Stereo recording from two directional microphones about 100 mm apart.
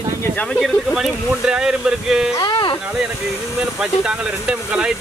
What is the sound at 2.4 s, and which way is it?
Speech, 50° left (ahead or behind).